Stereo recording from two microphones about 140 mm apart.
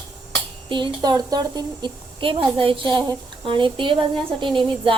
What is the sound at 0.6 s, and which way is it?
A woman's voice, 35° right (ahead or behind).